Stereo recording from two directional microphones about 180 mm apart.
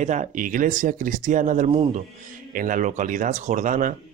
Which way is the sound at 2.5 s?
45° right (ahead or behind).